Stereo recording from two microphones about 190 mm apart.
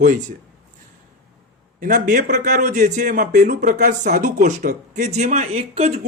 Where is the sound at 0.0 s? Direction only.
45° right (ahead or behind).